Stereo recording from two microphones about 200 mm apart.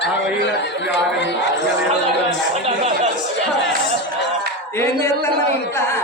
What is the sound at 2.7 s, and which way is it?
Speech, 35° right (ahead or behind).